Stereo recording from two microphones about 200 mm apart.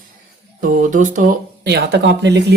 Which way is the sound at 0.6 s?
40° right (ahead or behind).